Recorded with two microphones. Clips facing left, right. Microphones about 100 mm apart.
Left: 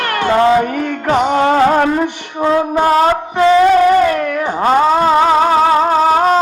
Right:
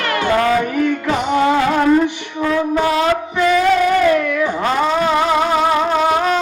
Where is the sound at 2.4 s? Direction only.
30° left (ahead or behind).